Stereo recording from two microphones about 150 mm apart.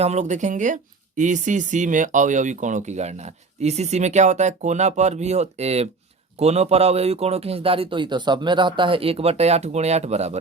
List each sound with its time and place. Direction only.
0.0 s speech: 50° right (ahead or behind)